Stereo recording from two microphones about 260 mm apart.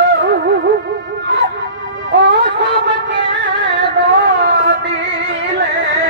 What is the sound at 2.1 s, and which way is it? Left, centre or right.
Music, right.